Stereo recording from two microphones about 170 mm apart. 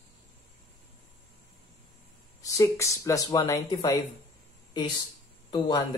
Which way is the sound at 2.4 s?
20° left (ahead or behind).